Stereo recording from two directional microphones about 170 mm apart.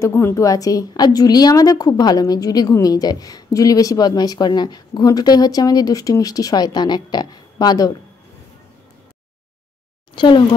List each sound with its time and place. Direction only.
0.0 s a woman's voice: 15° left (ahead or behind)
10.1 s speech: 30° left (ahead or behind)